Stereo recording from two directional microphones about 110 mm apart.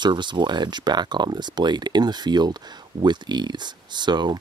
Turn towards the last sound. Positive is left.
turn(degrees=-40)  # may be behind; listen again after turning